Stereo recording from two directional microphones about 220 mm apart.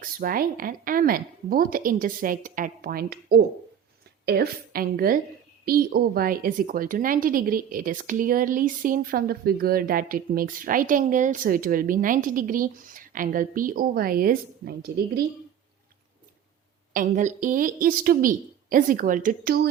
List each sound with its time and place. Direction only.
0.0 s a woman's voice: 40° right (ahead or behind)
16.9 s a woman's voice: 35° right (ahead or behind)